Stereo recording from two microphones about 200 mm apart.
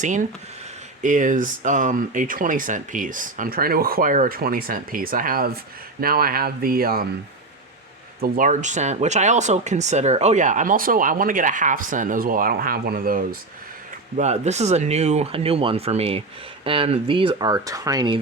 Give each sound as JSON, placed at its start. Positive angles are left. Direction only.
{"t": 0.0, "sound": "speech", "side_deg": -40}
{"t": 8.2, "sound": "speech", "side_deg": -40}
{"t": 14.2, "sound": "speech", "side_deg": -35}